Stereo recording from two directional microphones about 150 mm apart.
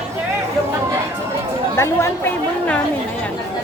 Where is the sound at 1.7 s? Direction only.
15° left (ahead or behind).